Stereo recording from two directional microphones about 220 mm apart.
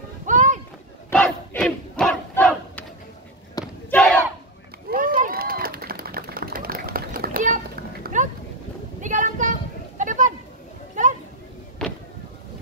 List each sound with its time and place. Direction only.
0.3 s a sound: 35° right (ahead or behind)
1.1 s battle cry: 5° left (ahead or behind)
3.6 s battle cry: 15° left (ahead or behind)
3.9 s battle cry: centre (ahead or behind)
4.8 s run: 40° right (ahead or behind)
9.0 s a sound: 35° right (ahead or behind)
11.8 s vehicle: centre (ahead or behind)